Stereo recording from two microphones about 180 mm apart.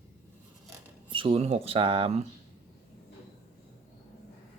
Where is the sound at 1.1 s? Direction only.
30° right (ahead or behind).